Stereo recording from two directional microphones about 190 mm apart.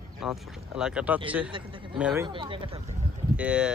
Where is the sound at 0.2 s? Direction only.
5° right (ahead or behind).